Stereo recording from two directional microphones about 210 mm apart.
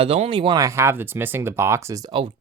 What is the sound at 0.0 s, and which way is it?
Speech, 30° right (ahead or behind).